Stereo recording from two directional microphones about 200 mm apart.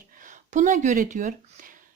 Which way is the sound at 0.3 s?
40° right (ahead or behind).